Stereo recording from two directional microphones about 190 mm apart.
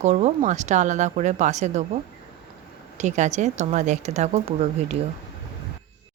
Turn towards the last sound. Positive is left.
turn(degrees=-35)  # may be behind; listen again after turning